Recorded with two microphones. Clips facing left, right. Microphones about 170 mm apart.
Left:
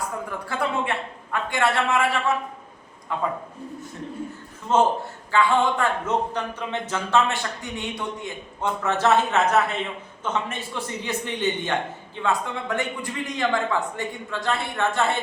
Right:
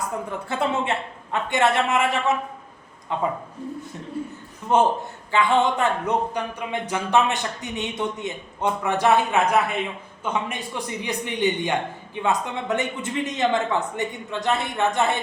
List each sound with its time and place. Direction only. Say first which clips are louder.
0.3 s a man's voice: right 3 dB; 25° right (ahead or behind)
4.7 s a man's voice: right 1 dB; 15° right (ahead or behind)